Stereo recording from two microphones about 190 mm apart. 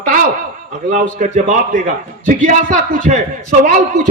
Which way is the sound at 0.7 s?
40° right (ahead or behind).